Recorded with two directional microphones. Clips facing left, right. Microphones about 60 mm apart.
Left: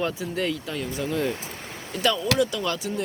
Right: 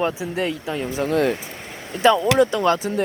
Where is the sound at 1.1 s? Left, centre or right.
Right.